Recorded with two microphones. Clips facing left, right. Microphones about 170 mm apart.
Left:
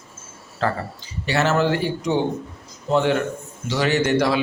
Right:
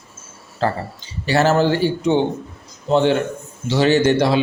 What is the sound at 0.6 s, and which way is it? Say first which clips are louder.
A man's voice: right 3 dB; 30° right (ahead or behind).